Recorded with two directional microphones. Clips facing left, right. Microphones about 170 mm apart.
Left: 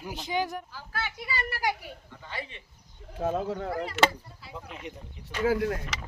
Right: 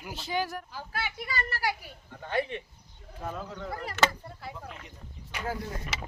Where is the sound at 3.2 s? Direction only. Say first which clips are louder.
Left 9 dB; 90° left.